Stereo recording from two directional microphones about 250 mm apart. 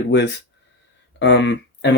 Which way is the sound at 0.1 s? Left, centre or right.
Left.